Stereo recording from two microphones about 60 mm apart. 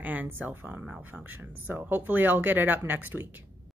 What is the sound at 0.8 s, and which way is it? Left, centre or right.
Speech, centre.